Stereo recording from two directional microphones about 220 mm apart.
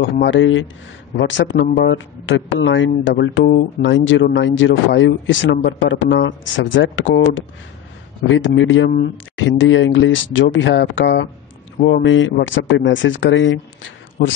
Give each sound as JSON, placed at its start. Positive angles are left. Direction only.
{"t": 0.0, "sound": "speech", "side_deg": 60}